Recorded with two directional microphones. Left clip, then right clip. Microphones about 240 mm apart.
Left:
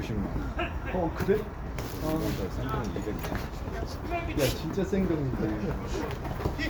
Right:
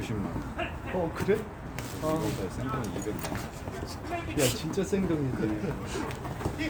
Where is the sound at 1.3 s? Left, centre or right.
Right.